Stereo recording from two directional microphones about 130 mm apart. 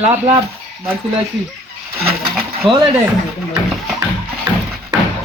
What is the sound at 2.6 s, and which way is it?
Speech, 40° right (ahead or behind).